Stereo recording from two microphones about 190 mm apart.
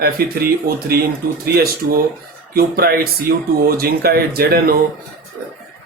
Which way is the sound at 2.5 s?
50° right (ahead or behind).